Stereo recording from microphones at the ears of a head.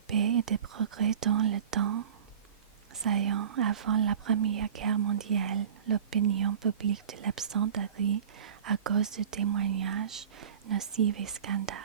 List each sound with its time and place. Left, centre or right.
0.1 s speech: right